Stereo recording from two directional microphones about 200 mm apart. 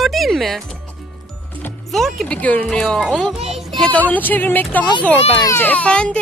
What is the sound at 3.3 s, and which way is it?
Music, 30° right (ahead or behind).